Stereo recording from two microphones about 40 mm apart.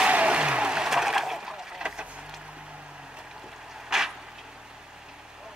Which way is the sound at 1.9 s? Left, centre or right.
Right.